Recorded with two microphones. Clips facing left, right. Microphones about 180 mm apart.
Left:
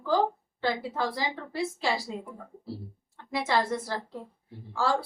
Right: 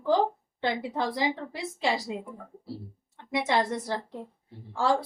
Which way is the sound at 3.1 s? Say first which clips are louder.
Right 1 dB; 20° right (ahead or behind).